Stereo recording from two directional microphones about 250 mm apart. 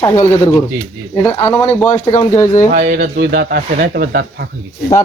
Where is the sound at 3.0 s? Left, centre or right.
Right.